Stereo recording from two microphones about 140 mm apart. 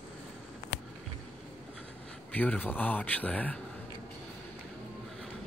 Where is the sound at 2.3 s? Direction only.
10° left (ahead or behind).